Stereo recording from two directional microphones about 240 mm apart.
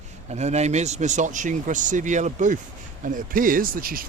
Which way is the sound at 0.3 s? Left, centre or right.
Right.